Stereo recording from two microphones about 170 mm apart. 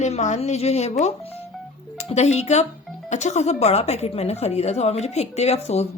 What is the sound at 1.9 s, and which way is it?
A woman's voice, 40° left (ahead or behind).